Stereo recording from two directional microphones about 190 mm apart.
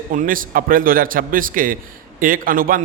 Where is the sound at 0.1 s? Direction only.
45° right (ahead or behind).